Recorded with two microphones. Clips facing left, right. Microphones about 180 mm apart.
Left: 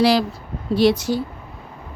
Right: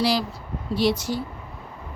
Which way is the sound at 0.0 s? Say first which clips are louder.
Left 6 dB; 65° left (ahead or behind).